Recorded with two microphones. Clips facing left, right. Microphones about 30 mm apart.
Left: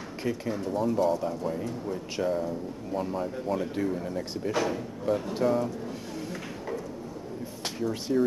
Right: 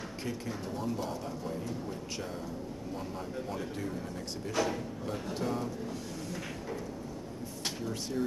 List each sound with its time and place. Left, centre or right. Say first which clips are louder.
0.2 s a man's voice: left 8 dB; centre
8.1 s speech: left 9 dB; left